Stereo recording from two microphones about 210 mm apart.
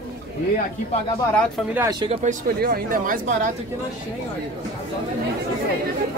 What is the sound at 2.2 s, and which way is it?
Speech, 45° right (ahead or behind).